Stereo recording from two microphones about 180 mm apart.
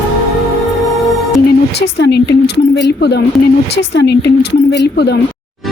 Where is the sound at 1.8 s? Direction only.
70° left (ahead or behind).